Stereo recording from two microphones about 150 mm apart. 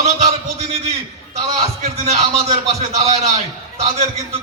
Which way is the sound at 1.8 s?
45° right (ahead or behind).